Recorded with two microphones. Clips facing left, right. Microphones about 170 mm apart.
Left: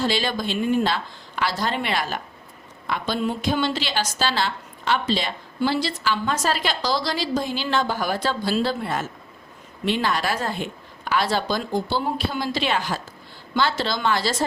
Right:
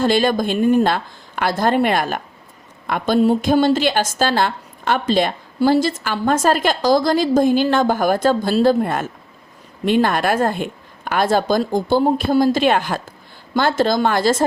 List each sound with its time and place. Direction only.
0.0 s a woman's voice: 50° right (ahead or behind)